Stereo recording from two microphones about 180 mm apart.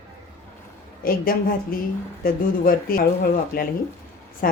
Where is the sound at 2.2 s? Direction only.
55° left (ahead or behind).